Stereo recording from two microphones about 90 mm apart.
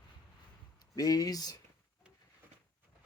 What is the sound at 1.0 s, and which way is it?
Speech, 45° left (ahead or behind).